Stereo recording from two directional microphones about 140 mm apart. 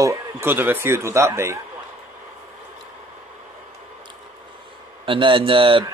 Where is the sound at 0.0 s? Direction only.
20° right (ahead or behind).